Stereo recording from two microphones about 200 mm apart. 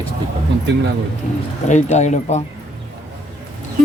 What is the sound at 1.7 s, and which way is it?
Speech, 35° left (ahead or behind).